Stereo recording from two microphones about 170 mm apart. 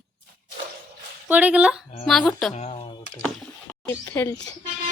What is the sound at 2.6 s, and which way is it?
Speech, 40° left (ahead or behind).